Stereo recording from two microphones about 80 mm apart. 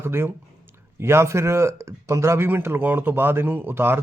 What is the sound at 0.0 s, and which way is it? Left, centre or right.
Speech, right.